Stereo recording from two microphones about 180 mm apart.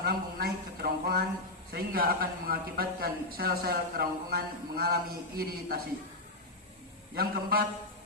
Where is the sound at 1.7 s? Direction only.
55° right (ahead or behind).